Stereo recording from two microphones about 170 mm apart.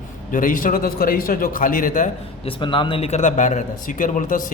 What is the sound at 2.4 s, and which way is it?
A man's voice, 30° left (ahead or behind).